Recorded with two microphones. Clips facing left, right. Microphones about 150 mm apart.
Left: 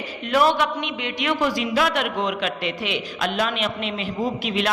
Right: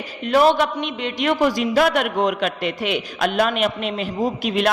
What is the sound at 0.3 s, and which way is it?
A man's voice, 35° right (ahead or behind).